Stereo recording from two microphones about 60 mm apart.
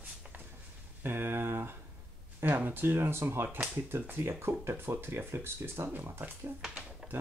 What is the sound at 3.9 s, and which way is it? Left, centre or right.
Speech, right.